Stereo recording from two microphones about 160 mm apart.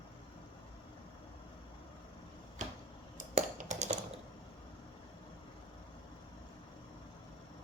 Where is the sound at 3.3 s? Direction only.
50° right (ahead or behind).